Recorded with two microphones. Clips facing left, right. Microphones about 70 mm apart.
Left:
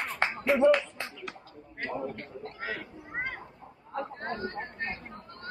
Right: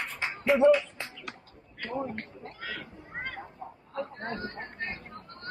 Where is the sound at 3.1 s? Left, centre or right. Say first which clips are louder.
Left 3 dB; centre.